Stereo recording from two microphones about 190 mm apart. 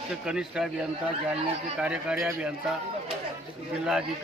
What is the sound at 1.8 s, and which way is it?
Speech, 5° right (ahead or behind).